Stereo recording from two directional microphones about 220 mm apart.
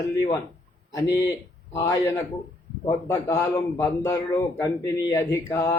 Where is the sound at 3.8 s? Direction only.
10° left (ahead or behind).